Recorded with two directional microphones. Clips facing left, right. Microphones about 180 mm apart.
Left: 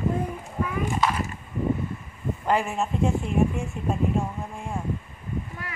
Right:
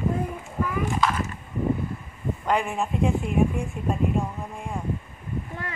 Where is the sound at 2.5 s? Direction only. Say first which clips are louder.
Even; 5° left (ahead or behind).